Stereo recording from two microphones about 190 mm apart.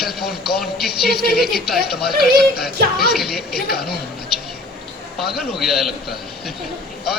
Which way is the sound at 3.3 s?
55° left (ahead or behind).